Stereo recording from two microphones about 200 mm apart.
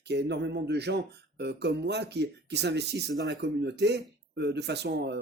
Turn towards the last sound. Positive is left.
turn(degrees=-55)  # may be behind; listen again after turning